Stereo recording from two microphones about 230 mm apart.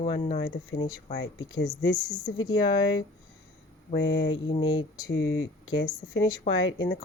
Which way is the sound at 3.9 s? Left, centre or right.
Left.